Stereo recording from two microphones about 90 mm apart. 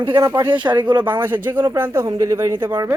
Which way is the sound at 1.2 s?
20° right (ahead or behind).